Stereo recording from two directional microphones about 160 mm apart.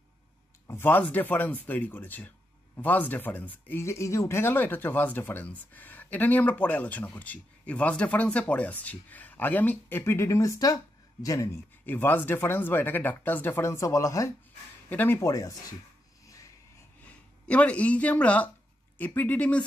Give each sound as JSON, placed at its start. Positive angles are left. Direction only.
{"t": 0.7, "sound": "speech", "side_deg": 15}
{"t": 17.0, "sound": "speech", "side_deg": 10}